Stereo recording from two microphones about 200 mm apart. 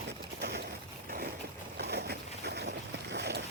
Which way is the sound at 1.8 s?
55° right (ahead or behind).